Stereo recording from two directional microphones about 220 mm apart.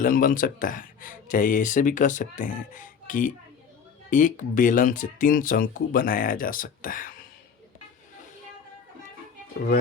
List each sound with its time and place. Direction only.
0.0 s speech: 40° left (ahead or behind)